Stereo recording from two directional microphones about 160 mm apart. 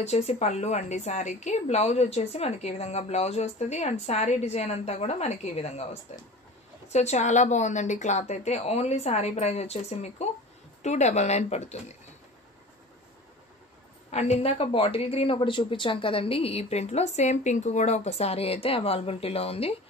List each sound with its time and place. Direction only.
0.0 s a woman's voice: 45° left (ahead or behind)
14.1 s speech: 45° left (ahead or behind)